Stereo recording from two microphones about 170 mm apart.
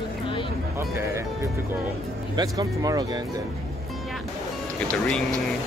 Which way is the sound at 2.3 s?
20° right (ahead or behind).